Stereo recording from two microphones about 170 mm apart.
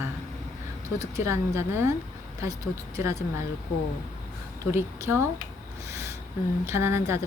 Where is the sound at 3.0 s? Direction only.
15° right (ahead or behind).